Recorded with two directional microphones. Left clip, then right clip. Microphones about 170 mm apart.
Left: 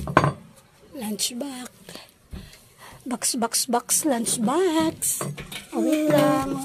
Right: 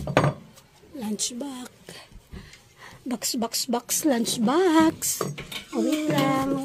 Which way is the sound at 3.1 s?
Centre (ahead or behind).